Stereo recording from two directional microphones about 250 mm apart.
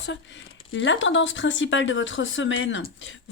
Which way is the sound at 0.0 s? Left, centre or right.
Left.